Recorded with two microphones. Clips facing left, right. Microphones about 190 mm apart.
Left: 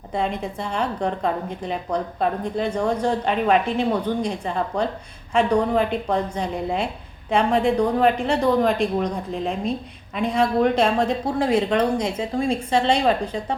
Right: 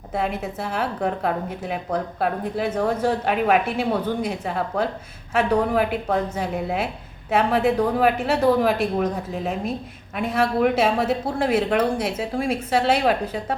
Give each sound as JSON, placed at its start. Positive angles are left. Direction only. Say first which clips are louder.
{"t": 0.1, "sound": "a woman's voice", "louder": "even", "side_deg": -5}